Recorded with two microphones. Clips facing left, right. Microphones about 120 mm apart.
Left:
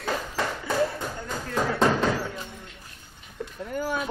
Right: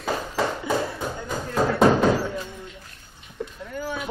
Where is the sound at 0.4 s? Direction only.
20° right (ahead or behind).